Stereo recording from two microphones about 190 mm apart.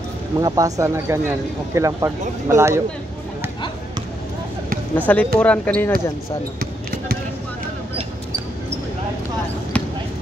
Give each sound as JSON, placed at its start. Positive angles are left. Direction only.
{"t": 0.4, "sound": "speech", "side_deg": -20}
{"t": 4.9, "sound": "speech", "side_deg": 10}